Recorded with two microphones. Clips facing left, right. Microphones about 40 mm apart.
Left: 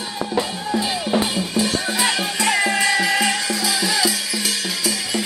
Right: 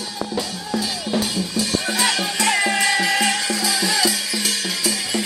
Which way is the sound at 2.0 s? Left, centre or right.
Centre.